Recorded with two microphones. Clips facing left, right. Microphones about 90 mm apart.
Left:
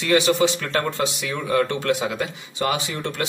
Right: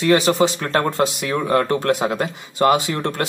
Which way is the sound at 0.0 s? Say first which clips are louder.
Right 3 dB; 40° right (ahead or behind).